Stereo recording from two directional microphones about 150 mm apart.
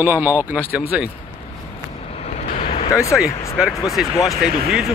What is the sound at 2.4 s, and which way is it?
Vehicle, 50° left (ahead or behind).